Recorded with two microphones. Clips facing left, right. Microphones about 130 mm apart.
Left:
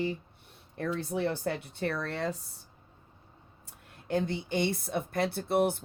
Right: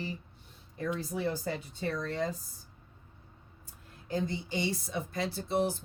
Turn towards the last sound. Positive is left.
turn(degrees=60)  # may be behind; listen again after turning